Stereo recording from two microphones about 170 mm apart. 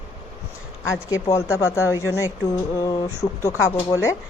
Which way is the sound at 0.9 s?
15° left (ahead or behind).